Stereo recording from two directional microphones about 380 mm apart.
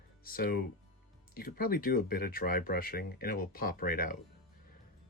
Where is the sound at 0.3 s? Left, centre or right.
Left.